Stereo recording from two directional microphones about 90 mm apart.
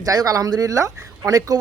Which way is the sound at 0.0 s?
40° right (ahead or behind).